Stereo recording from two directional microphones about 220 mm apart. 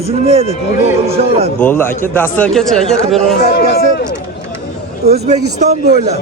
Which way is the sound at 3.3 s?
50° left (ahead or behind).